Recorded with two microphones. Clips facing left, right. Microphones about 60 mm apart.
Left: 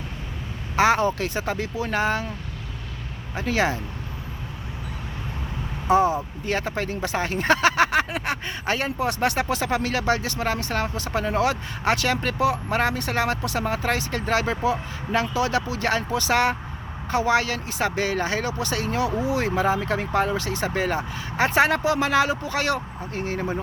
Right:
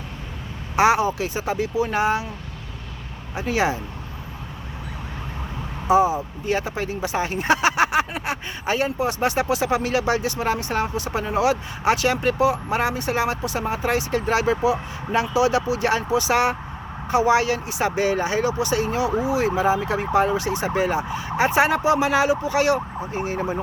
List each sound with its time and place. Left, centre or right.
0.8 s speech: centre
3.3 s speech: centre
5.9 s speech: centre